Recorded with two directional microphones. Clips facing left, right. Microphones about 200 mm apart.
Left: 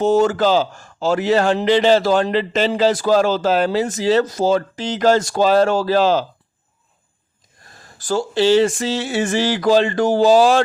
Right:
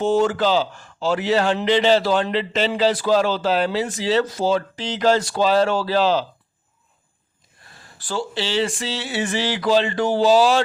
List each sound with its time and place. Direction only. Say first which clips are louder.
0.0 s a man's voice: left 3 dB; 40° left (ahead or behind)
7.6 s a man's voice: left 2 dB; 45° left (ahead or behind)